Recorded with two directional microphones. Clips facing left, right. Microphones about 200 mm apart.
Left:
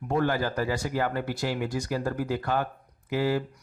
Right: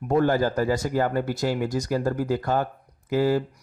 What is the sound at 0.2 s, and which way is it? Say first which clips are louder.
Speech: right 5 dB; 45° right (ahead or behind).